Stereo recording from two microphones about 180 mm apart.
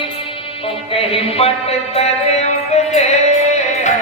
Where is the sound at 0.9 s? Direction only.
35° left (ahead or behind).